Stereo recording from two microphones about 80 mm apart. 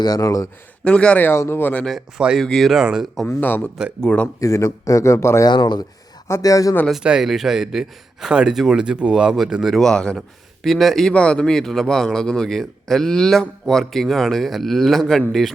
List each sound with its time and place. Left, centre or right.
0.0 s speech: left
0.9 s speech: centre
1.3 s speech: left
2.1 s a man's voice: centre
3.2 s speech: left
4.4 s speech: left
5.5 s speech: left
6.2 s speech: left
7.0 s a man's voice: centre
9.7 s a man's voice: centre